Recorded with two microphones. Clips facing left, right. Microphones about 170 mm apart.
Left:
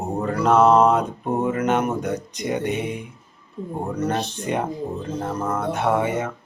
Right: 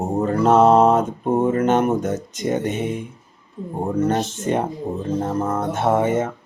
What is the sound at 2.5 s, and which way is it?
Speech, 45° right (ahead or behind).